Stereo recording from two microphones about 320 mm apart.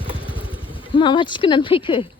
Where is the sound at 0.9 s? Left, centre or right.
Centre.